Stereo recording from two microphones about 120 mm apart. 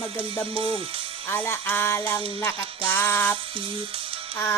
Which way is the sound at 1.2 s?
15° left (ahead or behind).